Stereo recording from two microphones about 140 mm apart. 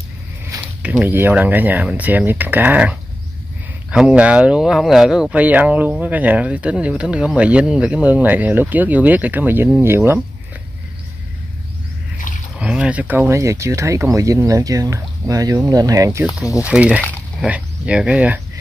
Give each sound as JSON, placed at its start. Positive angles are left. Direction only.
{"t": 0.8, "sound": "speech", "side_deg": -10}
{"t": 12.5, "sound": "speech", "side_deg": -10}
{"t": 16.6, "sound": "speech", "side_deg": -10}